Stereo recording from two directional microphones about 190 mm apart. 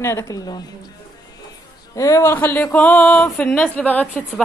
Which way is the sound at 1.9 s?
15° left (ahead or behind).